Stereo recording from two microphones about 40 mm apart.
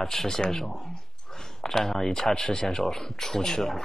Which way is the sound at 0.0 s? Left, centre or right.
Centre.